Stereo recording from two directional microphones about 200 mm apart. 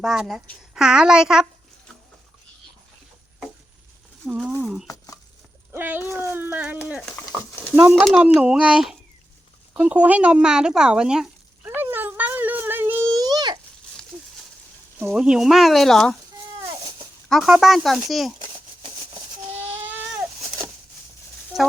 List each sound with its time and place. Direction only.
0.0 s a woman's voice: centre (ahead or behind)
4.2 s a woman's voice: 5° right (ahead or behind)
4.9 s a sound: 15° left (ahead or behind)
5.7 s speech: 10° right (ahead or behind)
7.0 s a woman's voice: 5° left (ahead or behind)
9.7 s a sound: 5° right (ahead or behind)
14.9 s a woman's voice: 5° right (ahead or behind)
17.2 s a woman's voice: centre (ahead or behind)
21.5 s a sound: centre (ahead or behind)